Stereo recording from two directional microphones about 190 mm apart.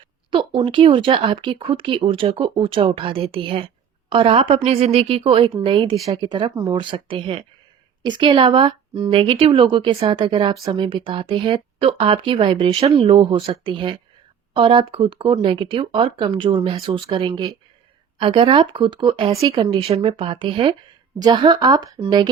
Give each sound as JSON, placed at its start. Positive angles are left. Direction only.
{"t": 0.3, "sound": "a woman's voice", "side_deg": -25}